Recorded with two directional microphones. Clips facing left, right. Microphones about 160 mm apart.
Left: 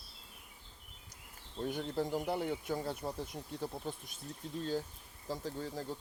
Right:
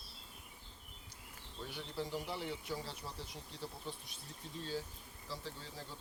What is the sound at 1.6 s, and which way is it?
Speech, 50° left (ahead or behind).